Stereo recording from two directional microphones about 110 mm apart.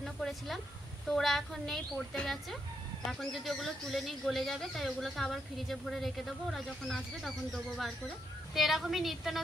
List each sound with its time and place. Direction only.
0.0 s speech: centre (ahead or behind)